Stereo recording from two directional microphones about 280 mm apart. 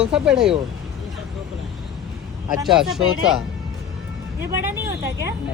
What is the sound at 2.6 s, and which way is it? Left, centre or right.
Speech, centre.